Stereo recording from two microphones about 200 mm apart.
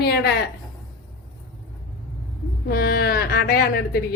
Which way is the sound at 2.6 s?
50° left (ahead or behind).